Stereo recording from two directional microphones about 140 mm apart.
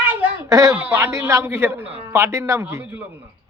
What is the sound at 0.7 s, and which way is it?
A man's voice, 15° right (ahead or behind).